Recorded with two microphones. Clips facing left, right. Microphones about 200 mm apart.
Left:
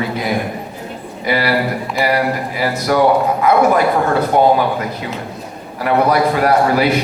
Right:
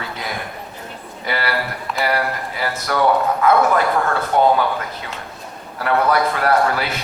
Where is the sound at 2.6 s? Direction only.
15° left (ahead or behind).